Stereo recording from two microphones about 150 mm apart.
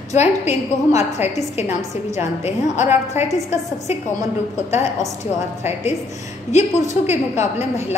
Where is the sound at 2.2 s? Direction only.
50° left (ahead or behind).